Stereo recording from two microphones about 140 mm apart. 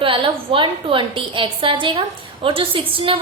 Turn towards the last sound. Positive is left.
turn(degrees=-40)  # may be behind; listen again after turning